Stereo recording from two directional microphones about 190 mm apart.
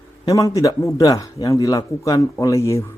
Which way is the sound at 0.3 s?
20° left (ahead or behind).